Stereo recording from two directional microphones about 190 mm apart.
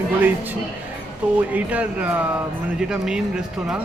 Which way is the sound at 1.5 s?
10° right (ahead or behind).